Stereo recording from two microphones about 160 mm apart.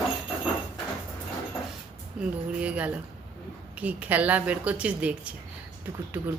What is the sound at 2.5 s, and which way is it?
Speech, 10° right (ahead or behind).